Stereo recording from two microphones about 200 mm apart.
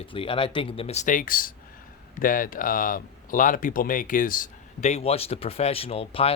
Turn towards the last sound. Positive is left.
turn(degrees=30)  # may be behind; listen again after turning